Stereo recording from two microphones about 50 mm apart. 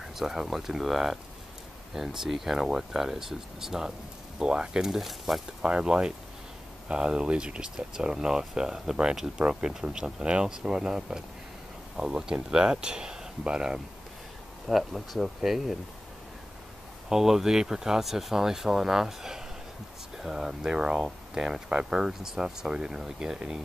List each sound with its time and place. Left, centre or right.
0.2 s speech: centre
5.6 s speech: centre
14.7 s speech: centre
17.1 s speech: centre